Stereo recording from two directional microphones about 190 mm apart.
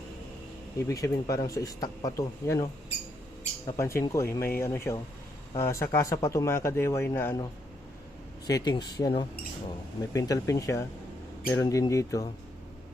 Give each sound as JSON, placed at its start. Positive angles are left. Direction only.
{"t": 0.9, "sound": "speech", "side_deg": 15}
{"t": 3.7, "sound": "speech", "side_deg": 15}
{"t": 8.4, "sound": "speech", "side_deg": 20}